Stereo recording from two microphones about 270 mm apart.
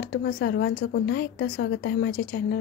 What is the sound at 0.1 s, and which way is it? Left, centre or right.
Speech, left.